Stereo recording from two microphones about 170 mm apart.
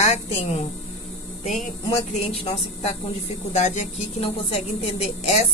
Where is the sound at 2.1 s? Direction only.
35° left (ahead or behind).